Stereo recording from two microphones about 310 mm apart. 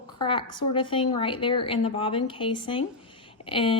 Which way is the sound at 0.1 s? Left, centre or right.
Centre.